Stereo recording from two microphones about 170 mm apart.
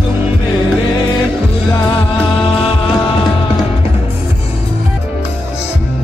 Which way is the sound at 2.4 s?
35° left (ahead or behind).